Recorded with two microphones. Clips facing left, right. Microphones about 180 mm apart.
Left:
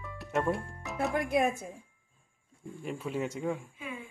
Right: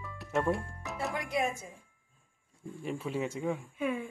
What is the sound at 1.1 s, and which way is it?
Speech, 50° left (ahead or behind).